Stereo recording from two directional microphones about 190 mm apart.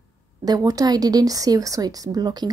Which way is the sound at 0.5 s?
20° right (ahead or behind).